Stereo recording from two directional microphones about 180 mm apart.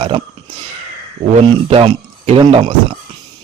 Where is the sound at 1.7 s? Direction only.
30° right (ahead or behind).